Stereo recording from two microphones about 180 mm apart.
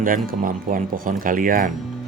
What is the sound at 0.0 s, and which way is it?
A man's voice, 50° right (ahead or behind).